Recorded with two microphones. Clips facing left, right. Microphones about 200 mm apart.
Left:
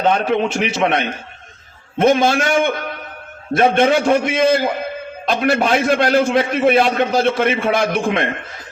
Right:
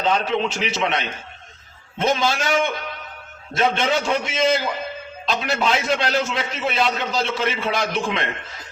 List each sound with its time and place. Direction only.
0.0 s a man's voice: 55° left (ahead or behind)